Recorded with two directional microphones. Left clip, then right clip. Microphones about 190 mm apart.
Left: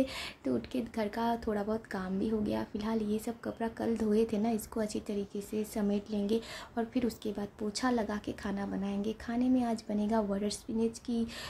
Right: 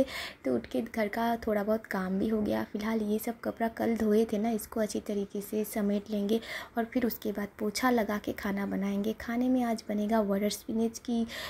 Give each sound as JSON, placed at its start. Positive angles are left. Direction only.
{"t": 0.0, "sound": "speech", "side_deg": -15}